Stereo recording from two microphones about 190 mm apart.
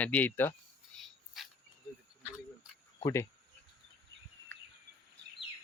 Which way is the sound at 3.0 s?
20° left (ahead or behind).